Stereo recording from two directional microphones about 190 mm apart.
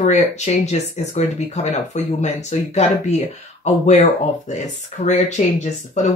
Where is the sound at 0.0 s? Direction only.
40° left (ahead or behind).